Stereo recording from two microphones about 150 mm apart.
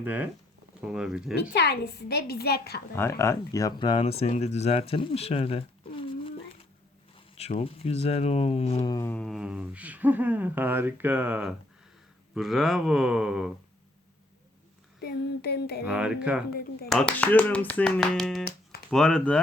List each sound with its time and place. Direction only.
0.0 s speech: 10° right (ahead or behind)
1.4 s a woman's voice: 90° left
2.9 s speech: 15° left (ahead or behind); by 8.9 s 45° left (ahead or behind)
9.0 s speech: 5° left (ahead or behind)
15.0 s a woman's voice: 90° left
15.9 s speech: 5° right (ahead or behind)
16.9 s speech: 5° left (ahead or behind)